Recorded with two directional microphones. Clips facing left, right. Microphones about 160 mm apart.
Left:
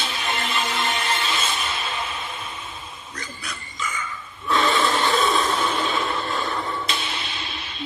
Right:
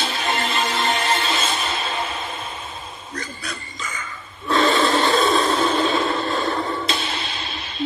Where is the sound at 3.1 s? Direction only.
40° right (ahead or behind).